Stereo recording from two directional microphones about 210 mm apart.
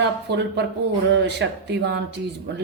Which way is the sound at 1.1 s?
55° right (ahead or behind).